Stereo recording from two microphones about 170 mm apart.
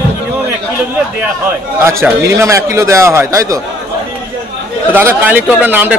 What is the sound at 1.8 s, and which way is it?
A man's voice, 15° right (ahead or behind).